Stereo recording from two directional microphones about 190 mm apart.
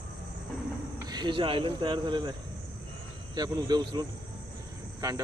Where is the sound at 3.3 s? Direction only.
20° right (ahead or behind).